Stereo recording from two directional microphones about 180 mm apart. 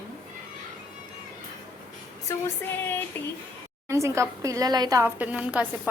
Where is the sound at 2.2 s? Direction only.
10° left (ahead or behind).